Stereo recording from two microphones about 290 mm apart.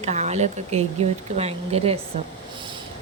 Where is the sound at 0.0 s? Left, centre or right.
Right.